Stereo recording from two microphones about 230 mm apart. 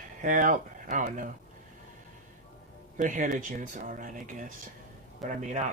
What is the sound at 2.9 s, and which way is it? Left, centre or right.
Speech, right.